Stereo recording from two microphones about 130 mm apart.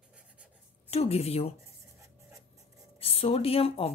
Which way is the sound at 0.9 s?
50° left (ahead or behind).